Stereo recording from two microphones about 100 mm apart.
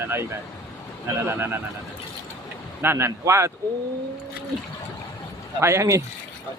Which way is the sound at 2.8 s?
25° right (ahead or behind).